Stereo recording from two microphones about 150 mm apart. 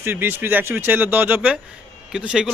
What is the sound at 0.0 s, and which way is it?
Speech, 15° right (ahead or behind).